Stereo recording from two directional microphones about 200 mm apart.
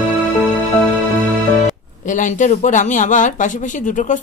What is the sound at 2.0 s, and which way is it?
Speech, 40° left (ahead or behind).